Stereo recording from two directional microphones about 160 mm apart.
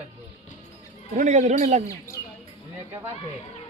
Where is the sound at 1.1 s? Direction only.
45° right (ahead or behind).